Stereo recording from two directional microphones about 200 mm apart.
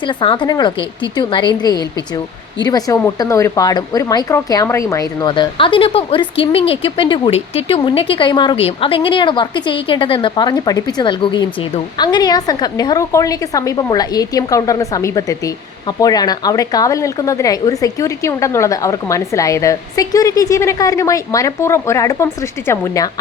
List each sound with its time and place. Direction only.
0.1 s a woman's voice: 25° left (ahead or behind)